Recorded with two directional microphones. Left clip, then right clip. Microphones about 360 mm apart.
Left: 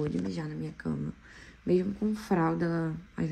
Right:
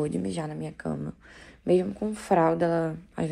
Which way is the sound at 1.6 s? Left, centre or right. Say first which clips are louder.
Right 4 dB; centre.